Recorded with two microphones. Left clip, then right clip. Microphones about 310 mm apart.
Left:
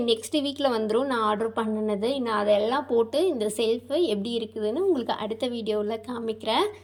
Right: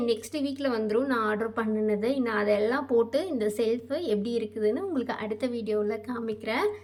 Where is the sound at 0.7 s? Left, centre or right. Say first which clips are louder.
Right 1 dB; centre.